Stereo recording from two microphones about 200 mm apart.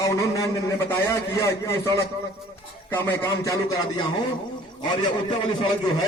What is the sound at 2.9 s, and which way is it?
A man's voice, 10° left (ahead or behind).